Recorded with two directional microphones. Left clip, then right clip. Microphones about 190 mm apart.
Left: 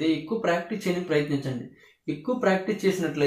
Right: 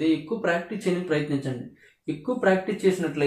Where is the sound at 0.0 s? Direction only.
20° right (ahead or behind).